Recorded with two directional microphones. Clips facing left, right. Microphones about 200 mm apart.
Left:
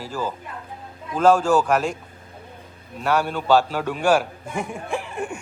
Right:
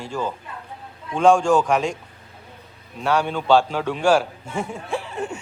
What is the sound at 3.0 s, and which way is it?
A man's voice, 5° left (ahead or behind).